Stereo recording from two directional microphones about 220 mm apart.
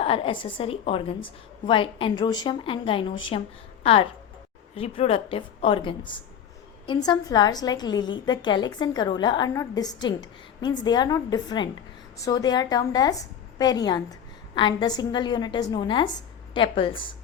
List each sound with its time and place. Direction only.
0.0 s a woman's voice: 25° left (ahead or behind)